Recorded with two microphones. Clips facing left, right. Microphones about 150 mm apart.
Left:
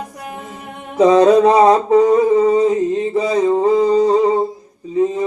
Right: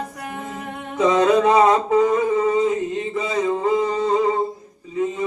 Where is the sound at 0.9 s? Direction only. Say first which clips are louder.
Left 6 dB; 35° left (ahead or behind).